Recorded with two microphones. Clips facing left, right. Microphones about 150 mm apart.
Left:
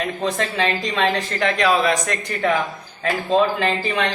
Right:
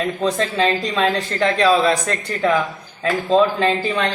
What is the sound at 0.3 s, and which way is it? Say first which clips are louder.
A man's voice: right 3 dB; 35° right (ahead or behind).